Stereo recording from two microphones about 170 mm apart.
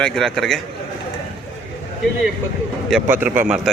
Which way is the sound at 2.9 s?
10° right (ahead or behind).